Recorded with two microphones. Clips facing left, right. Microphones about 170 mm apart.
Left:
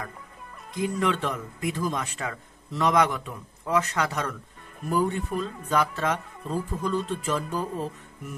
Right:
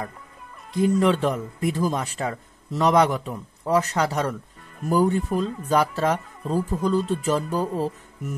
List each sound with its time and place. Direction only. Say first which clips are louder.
0.7 s speech: right 7 dB; 35° right (ahead or behind)